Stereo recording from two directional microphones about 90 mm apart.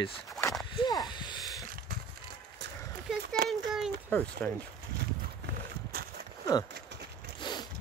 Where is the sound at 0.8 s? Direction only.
50° left (ahead or behind).